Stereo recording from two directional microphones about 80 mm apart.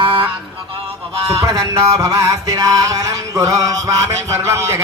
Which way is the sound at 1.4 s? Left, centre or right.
Right.